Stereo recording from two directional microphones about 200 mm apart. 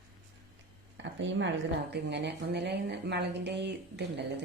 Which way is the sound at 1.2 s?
65° right (ahead or behind).